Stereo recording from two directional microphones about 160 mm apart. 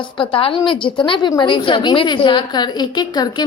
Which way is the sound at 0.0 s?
35° left (ahead or behind).